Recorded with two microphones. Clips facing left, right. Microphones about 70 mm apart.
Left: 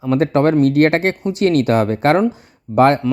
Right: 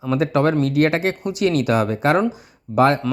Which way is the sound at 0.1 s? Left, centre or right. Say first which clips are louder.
Left 4 dB; left.